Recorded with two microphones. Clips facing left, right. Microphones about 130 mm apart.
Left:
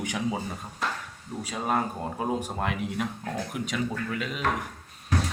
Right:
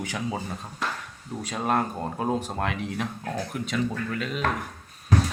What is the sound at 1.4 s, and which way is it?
Speech, 5° left (ahead or behind).